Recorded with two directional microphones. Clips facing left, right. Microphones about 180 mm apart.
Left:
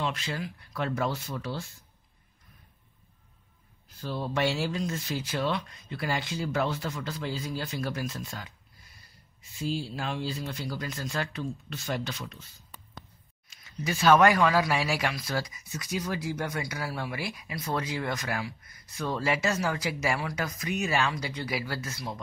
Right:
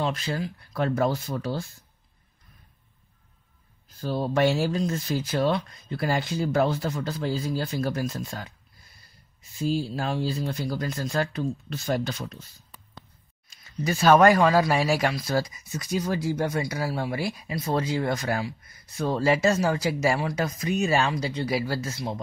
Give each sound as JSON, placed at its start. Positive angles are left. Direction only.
{"t": 0.0, "sound": "speech", "side_deg": -35}
{"t": 4.0, "sound": "speech", "side_deg": -40}
{"t": 9.6, "sound": "speech", "side_deg": -40}
{"t": 13.5, "sound": "speech", "side_deg": -40}